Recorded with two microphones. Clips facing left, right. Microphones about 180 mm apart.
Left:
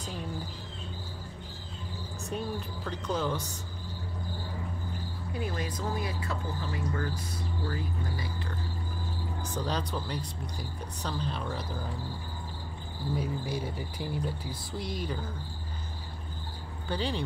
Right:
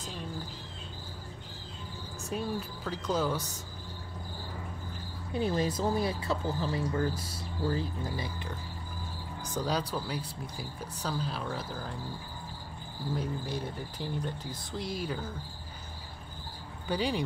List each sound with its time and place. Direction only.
2.3 s speech: 5° right (ahead or behind)
5.3 s speech: 30° right (ahead or behind)
9.6 s speech: 10° right (ahead or behind)
13.1 s speech: 5° left (ahead or behind)
16.9 s speech: 10° right (ahead or behind)